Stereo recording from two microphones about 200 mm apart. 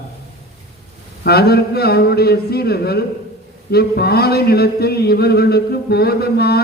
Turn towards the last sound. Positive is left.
turn(degrees=50)  # may be behind; listen again after turning